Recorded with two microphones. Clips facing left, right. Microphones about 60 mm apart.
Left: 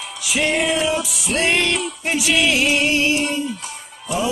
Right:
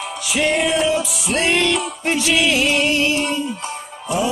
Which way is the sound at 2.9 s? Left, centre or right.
Centre.